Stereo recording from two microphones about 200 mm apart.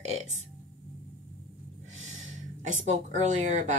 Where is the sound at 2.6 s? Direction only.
40° right (ahead or behind).